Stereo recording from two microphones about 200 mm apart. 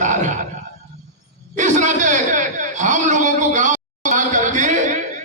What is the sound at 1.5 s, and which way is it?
A man's voice, 35° right (ahead or behind).